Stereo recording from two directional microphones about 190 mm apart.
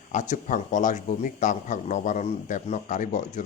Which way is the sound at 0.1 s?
40° left (ahead or behind).